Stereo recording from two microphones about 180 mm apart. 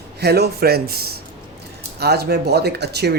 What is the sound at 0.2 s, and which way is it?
Speech, 65° right (ahead or behind).